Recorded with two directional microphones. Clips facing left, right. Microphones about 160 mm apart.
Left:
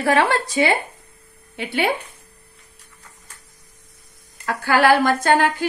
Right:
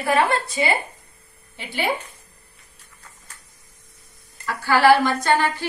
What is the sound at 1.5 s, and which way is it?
Speech, 65° left (ahead or behind).